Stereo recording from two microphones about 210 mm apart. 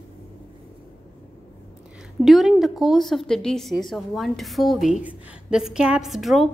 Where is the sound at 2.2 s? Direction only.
Centre (ahead or behind).